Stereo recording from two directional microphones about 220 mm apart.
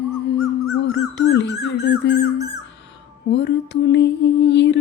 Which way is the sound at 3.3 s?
50° left (ahead or behind).